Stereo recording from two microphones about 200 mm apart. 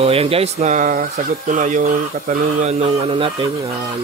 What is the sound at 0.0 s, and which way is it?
Speech, 30° right (ahead or behind).